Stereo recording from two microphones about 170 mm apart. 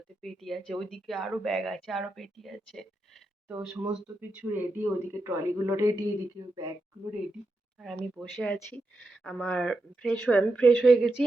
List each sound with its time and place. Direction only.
0.2 s speech: centre (ahead or behind)
3.5 s speech: 15° right (ahead or behind)
7.8 s speech: centre (ahead or behind)